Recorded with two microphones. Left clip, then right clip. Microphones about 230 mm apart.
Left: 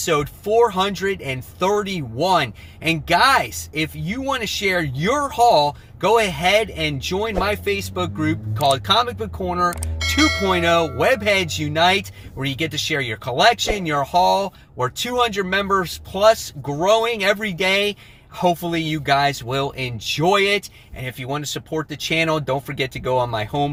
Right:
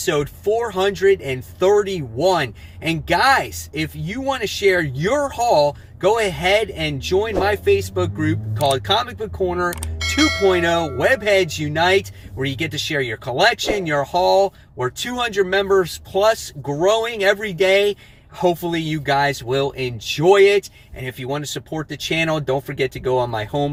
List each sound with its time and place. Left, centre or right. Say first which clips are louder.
0.0 s speech: right 1 dB; centre
10.0 s speech: right 1 dB; centre
10.5 s speech: left 1 dB; centre